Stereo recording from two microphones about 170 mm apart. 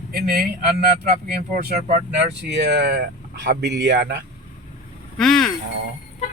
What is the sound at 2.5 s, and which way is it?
Speech, 85° right.